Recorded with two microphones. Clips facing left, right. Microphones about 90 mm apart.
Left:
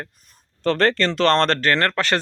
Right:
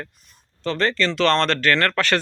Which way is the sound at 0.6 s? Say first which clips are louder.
Left 3 dB; 55° left (ahead or behind).